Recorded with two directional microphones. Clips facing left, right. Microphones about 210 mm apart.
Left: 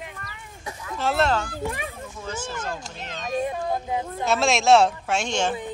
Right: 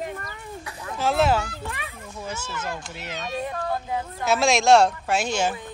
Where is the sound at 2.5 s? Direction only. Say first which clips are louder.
Even; 40° left (ahead or behind).